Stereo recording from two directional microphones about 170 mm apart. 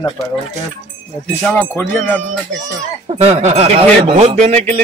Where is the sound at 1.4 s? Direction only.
10° left (ahead or behind).